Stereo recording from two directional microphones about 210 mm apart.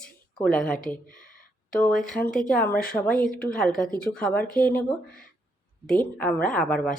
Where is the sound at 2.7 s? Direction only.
45° left (ahead or behind).